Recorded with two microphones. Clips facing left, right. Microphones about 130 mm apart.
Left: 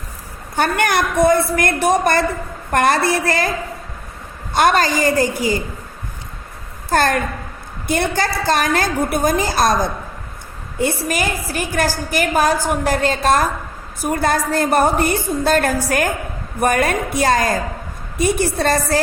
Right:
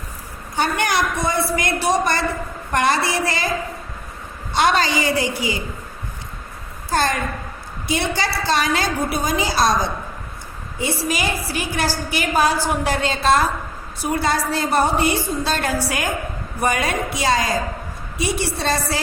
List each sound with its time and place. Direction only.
0.5 s a woman's voice: 55° left (ahead or behind)
4.5 s a woman's voice: 50° left (ahead or behind)
6.9 s a woman's voice: 55° left (ahead or behind)